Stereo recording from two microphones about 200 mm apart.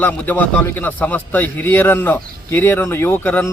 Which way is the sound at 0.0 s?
10° left (ahead or behind).